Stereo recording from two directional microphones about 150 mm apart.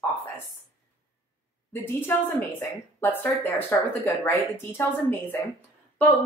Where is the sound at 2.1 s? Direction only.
15° left (ahead or behind).